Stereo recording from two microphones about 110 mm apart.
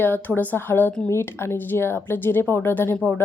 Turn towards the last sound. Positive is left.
turn(degrees=20)  # may be behind; listen again after turning